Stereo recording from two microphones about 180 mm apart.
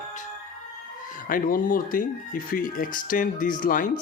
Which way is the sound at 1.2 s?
50° left (ahead or behind).